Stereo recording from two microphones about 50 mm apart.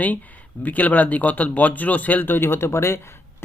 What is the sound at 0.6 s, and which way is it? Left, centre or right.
Speech, left.